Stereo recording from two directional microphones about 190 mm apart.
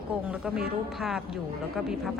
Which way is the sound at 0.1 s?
5° right (ahead or behind).